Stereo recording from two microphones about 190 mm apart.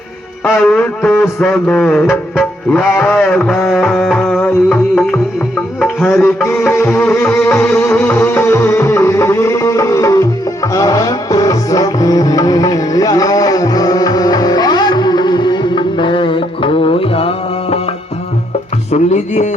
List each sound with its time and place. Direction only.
0.4 s music: 5° left (ahead or behind)
2.9 s a man's voice: 10° left (ahead or behind)
3.7 s music: 5° left (ahead or behind)
6.7 s music: 10° left (ahead or behind); by 17.9 s 30° left (ahead or behind)
18.9 s speech: 35° left (ahead or behind)